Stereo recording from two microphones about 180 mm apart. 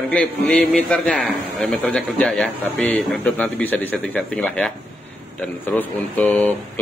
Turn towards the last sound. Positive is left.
turn(degrees=10)  # may be behind; listen again after turning